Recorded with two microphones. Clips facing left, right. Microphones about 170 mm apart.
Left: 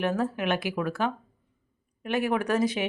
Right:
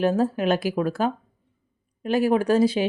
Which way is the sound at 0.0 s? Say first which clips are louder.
Right 6 dB; 30° right (ahead or behind).